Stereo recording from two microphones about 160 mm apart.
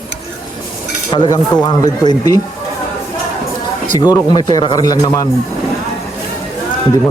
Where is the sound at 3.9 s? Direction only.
25° left (ahead or behind).